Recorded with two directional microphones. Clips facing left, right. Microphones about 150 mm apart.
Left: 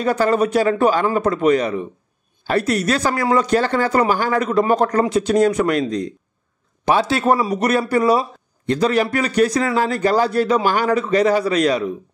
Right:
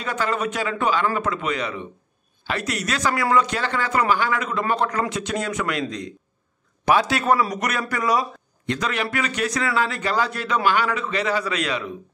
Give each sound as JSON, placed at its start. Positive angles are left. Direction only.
{"t": 0.0, "sound": "a man's voice", "side_deg": 40}